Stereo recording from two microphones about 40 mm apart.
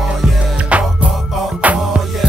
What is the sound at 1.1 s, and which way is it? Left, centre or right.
Music, centre.